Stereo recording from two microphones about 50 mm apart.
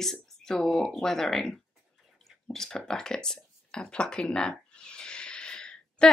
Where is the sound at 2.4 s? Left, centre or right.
Centre.